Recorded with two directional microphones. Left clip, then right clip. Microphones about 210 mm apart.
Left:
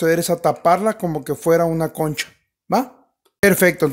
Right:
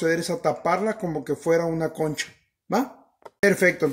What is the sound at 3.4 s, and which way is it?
Speech, 45° left (ahead or behind).